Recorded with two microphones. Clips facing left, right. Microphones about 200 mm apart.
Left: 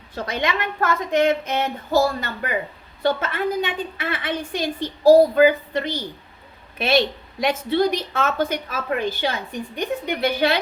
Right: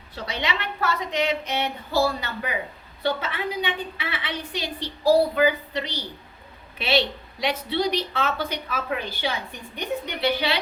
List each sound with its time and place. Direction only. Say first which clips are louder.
0.1 s a woman's voice: left 5 dB; 50° left (ahead or behind)